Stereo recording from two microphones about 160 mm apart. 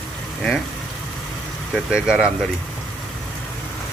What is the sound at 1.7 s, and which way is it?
Speech, 5° right (ahead or behind).